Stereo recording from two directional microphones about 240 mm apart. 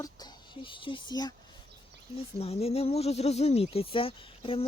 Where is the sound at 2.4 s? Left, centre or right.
Left.